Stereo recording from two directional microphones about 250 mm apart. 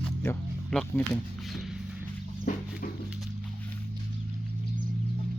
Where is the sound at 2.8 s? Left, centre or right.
Left.